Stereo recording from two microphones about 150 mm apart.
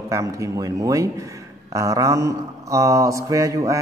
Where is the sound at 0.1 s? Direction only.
20° right (ahead or behind).